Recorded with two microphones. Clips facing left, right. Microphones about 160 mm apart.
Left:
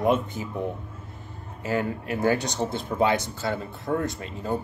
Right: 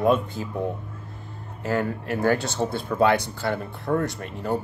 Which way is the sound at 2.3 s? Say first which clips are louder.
Right 1 dB; 15° left (ahead or behind).